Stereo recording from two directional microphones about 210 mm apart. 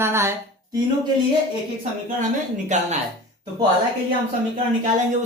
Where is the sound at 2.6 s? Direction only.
35° right (ahead or behind).